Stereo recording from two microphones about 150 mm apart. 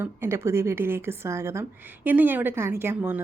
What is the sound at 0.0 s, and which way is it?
A woman's voice, 15° right (ahead or behind).